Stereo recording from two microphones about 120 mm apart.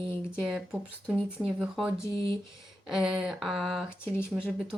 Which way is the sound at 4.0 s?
20° left (ahead or behind).